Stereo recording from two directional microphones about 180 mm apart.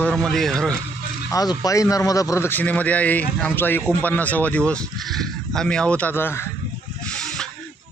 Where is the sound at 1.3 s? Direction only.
20° left (ahead or behind).